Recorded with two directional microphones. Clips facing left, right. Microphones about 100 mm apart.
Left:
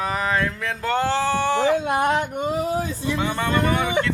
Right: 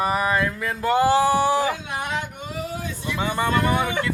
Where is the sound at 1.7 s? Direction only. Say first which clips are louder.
Left 8 dB; 50° left (ahead or behind).